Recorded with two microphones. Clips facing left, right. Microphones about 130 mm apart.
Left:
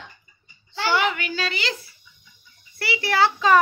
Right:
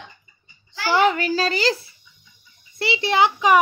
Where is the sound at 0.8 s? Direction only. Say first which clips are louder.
Right 5 dB; 35° right (ahead or behind).